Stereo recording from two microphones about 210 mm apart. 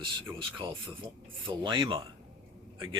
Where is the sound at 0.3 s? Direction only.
25° right (ahead or behind).